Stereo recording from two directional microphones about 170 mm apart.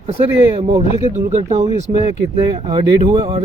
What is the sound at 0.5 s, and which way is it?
Speech, 30° right (ahead or behind).